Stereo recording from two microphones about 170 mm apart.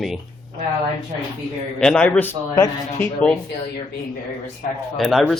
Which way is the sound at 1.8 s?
5° left (ahead or behind).